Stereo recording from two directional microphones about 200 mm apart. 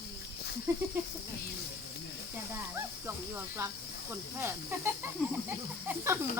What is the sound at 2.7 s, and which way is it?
Snake, 10° right (ahead or behind).